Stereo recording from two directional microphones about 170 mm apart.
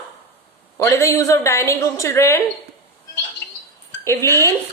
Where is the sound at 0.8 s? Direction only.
15° left (ahead or behind).